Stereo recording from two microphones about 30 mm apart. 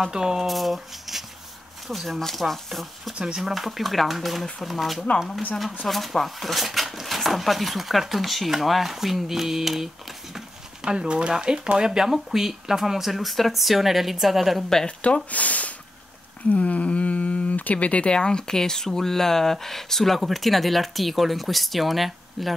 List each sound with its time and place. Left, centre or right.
0.1 s speech: right
0.4 s speech: centre
5.9 s speech: centre
6.2 s speech: centre
10.9 s speech: right
12.1 s speech: centre
15.0 s speech: left
16.4 s a sound: left
18.1 s speech: left
18.5 s speech: centre